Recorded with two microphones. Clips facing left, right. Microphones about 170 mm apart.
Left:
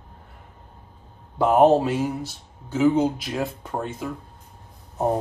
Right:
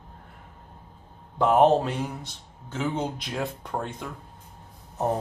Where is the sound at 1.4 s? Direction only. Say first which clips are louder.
Left 3 dB; 5° left (ahead or behind).